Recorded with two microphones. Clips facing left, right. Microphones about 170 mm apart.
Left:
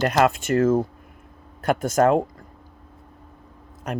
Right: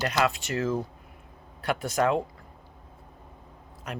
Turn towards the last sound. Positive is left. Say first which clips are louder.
# left 8 dB
turn(degrees=45)  # may be behind; listen again after turning